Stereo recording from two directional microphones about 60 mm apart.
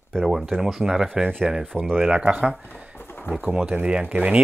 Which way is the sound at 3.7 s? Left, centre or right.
Centre.